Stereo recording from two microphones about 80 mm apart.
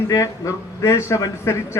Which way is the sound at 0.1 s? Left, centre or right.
Left.